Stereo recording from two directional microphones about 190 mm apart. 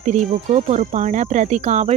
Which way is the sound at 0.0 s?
40° right (ahead or behind).